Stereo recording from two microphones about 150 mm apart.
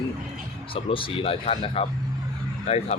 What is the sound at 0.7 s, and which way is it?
Speech, 40° left (ahead or behind).